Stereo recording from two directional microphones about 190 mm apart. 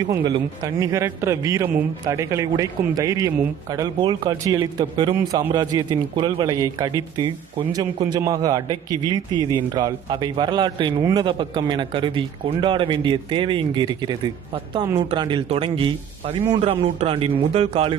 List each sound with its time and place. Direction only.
0.0 s a man's voice: 20° right (ahead or behind)